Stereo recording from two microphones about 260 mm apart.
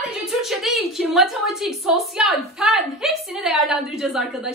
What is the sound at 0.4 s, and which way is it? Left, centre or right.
A woman's voice, centre.